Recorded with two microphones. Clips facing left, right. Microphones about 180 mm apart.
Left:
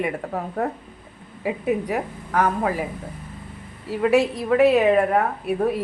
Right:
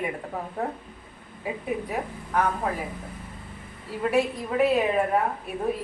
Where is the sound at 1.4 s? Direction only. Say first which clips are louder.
Left 7 dB; 85° left.